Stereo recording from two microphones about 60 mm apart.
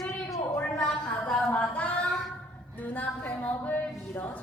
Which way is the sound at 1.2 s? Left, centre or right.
Centre.